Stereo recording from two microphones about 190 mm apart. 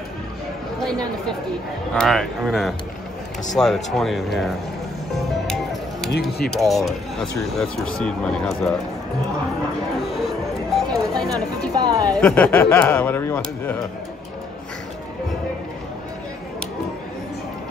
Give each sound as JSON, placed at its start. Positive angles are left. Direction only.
{"t": 2.0, "sound": "speech", "side_deg": 0}
{"t": 5.1, "sound": "music", "side_deg": 0}
{"t": 6.4, "sound": "speech", "side_deg": 0}
{"t": 10.1, "sound": "music", "side_deg": 0}
{"t": 11.7, "sound": "speech", "side_deg": -20}
{"t": 12.1, "sound": "speech", "side_deg": 5}